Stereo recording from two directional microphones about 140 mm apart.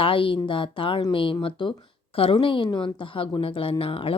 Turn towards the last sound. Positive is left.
turn(degrees=40)  # may be behind; listen again after turning